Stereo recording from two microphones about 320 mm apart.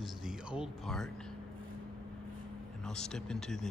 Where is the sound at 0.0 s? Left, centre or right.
Centre.